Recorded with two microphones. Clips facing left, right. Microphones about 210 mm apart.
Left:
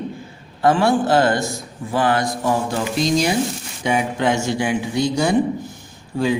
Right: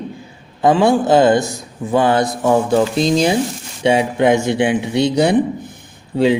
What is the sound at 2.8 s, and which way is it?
Speech, 30° right (ahead or behind).